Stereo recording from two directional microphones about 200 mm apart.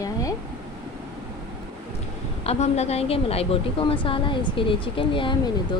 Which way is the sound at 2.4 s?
30° left (ahead or behind).